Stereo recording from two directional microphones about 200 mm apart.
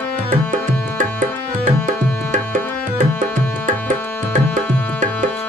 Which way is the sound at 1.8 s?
40° right (ahead or behind).